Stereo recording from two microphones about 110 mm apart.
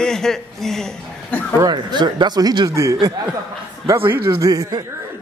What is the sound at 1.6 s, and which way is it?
Speech, 40° right (ahead or behind).